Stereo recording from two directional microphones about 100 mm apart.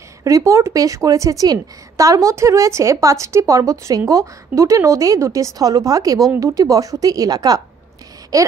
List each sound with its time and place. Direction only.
0.2 s a woman's voice: 30° right (ahead or behind)